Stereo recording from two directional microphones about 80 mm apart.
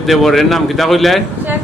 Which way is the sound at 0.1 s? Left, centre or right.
Centre.